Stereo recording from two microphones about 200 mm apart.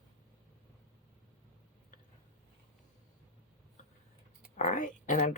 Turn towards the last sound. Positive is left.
turn(degrees=40)  # may be behind; listen again after turning